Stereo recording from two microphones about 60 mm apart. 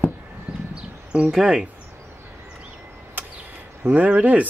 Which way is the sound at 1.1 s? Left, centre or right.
Centre.